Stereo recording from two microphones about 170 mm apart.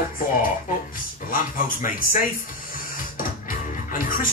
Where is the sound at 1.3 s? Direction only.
55° left (ahead or behind).